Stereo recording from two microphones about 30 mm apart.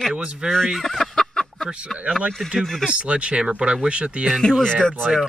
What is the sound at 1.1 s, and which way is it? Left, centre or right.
Fowl, centre.